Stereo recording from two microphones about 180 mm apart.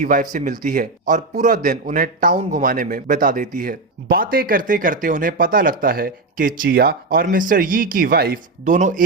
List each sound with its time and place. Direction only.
0.0 s speech: 45° right (ahead or behind)